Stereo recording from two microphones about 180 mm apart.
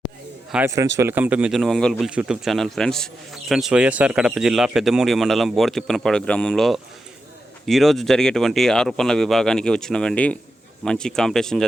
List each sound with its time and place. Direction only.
0.5 s speech: 15° right (ahead or behind); by 11.6 s centre (ahead or behind)